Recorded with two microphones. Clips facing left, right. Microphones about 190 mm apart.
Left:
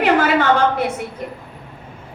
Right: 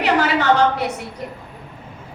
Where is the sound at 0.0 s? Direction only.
50° left (ahead or behind).